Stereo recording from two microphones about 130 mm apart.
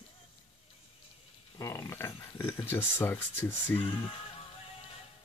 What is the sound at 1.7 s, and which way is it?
Speech, 20° left (ahead or behind).